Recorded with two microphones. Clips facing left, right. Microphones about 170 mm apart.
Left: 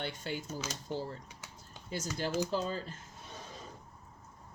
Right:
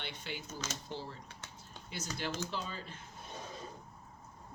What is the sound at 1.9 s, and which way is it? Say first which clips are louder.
A woman's voice: left 5 dB; 40° left (ahead or behind).